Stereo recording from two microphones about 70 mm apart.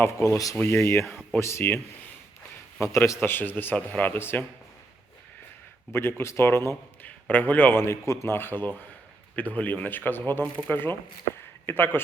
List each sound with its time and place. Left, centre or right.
0.0 s speech: left
0.5 s speech: left
3.2 s a man's voice: left
5.9 s speech: left
7.0 s a man's voice: left